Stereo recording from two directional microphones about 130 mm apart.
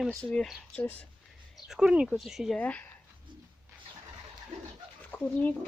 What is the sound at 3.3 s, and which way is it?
Bird, 35° right (ahead or behind).